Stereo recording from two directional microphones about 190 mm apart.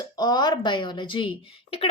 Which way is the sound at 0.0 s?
20° left (ahead or behind).